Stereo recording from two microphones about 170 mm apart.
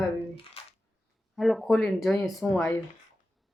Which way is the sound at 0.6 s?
35° left (ahead or behind).